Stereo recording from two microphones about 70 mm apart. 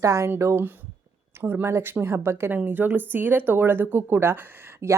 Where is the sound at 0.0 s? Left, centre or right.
Right.